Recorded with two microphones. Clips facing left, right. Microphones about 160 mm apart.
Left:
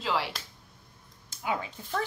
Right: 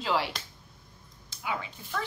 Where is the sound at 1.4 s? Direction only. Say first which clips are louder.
Left 3 dB; 40° left (ahead or behind).